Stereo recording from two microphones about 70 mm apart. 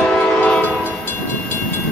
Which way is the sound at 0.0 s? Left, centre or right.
Centre.